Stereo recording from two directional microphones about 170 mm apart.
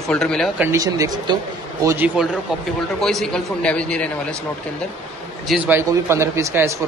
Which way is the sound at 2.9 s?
5° left (ahead or behind).